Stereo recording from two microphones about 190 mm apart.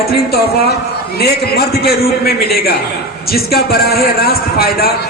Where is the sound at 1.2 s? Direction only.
55° left (ahead or behind).